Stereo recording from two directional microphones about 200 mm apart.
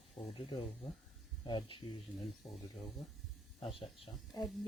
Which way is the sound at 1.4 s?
25° left (ahead or behind).